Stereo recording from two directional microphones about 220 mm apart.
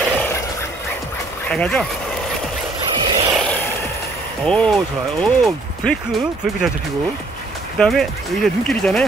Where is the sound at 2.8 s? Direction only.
20° right (ahead or behind).